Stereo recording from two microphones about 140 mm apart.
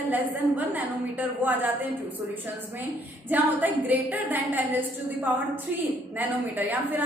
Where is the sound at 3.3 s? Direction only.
10° right (ahead or behind).